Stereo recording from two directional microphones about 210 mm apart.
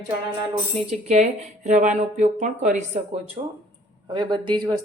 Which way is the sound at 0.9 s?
35° right (ahead or behind).